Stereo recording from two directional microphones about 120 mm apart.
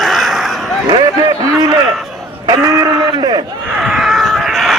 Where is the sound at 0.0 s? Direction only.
Centre (ahead or behind).